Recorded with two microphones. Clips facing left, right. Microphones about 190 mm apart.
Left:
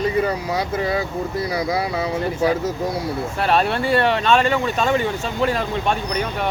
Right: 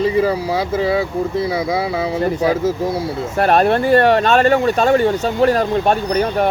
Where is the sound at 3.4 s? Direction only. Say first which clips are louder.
Right 6 dB; 50° right (ahead or behind).